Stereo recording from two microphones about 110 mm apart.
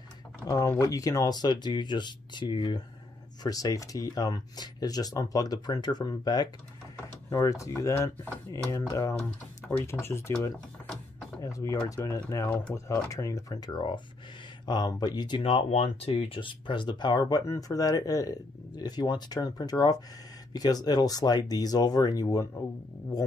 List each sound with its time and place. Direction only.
0.5 s speech: 30° left (ahead or behind)
3.4 s speech: 35° left (ahead or behind)
12.4 s speech: 10° left (ahead or behind)
12.7 s speech: 25° left (ahead or behind)
15.4 s speech: 65° left (ahead or behind)
16.4 s speech: 45° left (ahead or behind)